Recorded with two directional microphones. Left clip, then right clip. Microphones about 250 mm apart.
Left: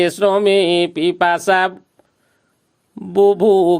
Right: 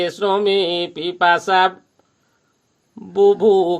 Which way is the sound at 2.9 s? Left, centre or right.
Left.